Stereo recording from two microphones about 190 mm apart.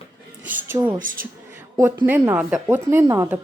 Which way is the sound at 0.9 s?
45° right (ahead or behind).